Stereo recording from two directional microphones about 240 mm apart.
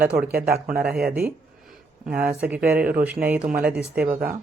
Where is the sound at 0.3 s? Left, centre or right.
Right.